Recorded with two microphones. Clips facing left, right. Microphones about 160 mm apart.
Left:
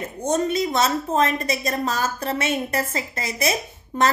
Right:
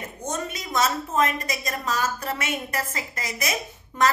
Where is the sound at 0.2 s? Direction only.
30° left (ahead or behind).